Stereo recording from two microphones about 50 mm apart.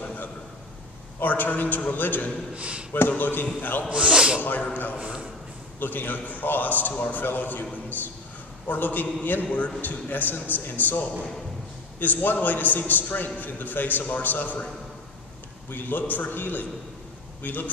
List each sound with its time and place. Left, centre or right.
0.0 s a sound: left
1.2 s a man's voice: left
2.5 s speech: right
2.9 s a man's voice: left
3.9 s speech: right
4.4 s a man's voice: left
4.9 s speech: right
5.8 s a man's voice: left
15.7 s a man's voice: left